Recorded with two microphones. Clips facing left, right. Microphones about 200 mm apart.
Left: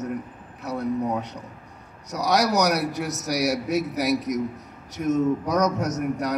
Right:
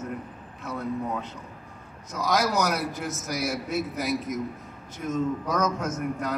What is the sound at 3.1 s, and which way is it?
Speech, 40° left (ahead or behind).